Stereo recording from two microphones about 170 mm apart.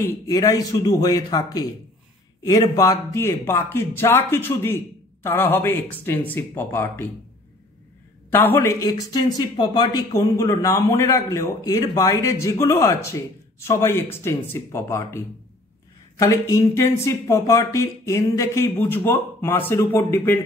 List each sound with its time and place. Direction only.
0.0 s a man's voice: 20° left (ahead or behind)
8.3 s speech: 10° left (ahead or behind)